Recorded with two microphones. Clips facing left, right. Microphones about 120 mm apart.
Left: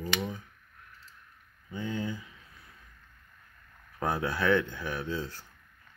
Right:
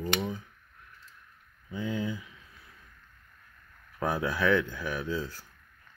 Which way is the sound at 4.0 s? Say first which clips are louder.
Right 1 dB; 5° right (ahead or behind).